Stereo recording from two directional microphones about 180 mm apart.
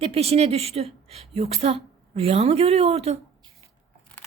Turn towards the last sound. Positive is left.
turn(degrees=-35)  # may be behind; listen again after turning